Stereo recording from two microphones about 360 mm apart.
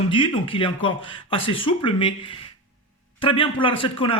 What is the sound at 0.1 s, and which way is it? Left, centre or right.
Speech, centre.